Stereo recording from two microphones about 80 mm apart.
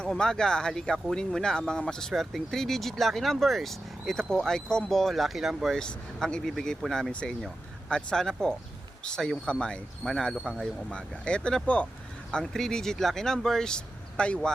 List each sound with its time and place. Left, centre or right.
0.0 s speech: centre
5.7 s speech: centre
7.1 s speech: centre